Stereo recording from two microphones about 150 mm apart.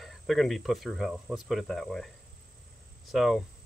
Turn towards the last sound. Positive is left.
turn(degrees=0)  # may be behind; listen again after turning